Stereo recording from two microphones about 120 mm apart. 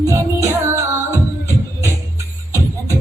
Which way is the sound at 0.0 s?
25° right (ahead or behind).